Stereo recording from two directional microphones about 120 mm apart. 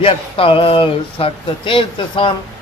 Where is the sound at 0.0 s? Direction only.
50° left (ahead or behind).